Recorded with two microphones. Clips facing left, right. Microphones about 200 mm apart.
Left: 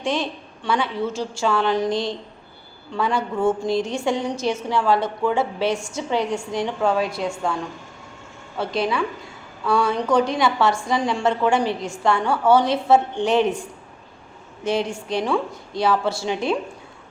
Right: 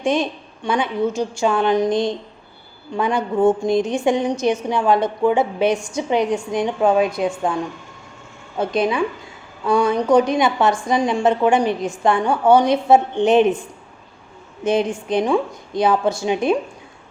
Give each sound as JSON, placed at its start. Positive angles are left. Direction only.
{"t": 0.0, "sound": "a woman's voice", "side_deg": -20}
{"t": 14.6, "sound": "a woman's voice", "side_deg": -20}